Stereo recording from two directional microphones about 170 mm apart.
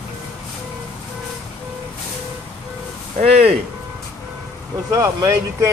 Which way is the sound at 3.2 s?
35° right (ahead or behind).